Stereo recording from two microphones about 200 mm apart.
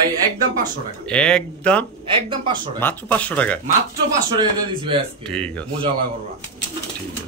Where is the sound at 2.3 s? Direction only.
25° right (ahead or behind).